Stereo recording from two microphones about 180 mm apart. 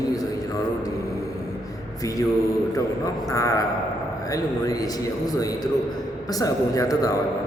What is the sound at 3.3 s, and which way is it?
A man's voice, 20° left (ahead or behind).